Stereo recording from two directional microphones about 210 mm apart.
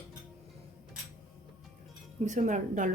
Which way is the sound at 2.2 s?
35° right (ahead or behind).